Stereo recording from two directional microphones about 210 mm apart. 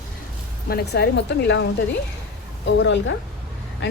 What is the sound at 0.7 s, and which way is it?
Speech, 50° left (ahead or behind).